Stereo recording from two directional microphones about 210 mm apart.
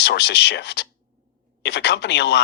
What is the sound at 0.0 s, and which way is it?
Speech, 55° left (ahead or behind).